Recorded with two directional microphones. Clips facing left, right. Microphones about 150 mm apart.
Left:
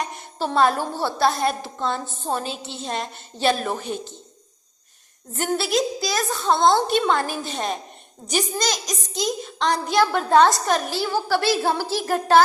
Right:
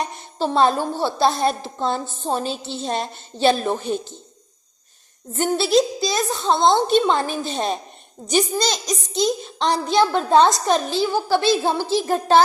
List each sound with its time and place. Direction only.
0.0 s a child's voice: 25° right (ahead or behind)
5.4 s a child's voice: 30° right (ahead or behind)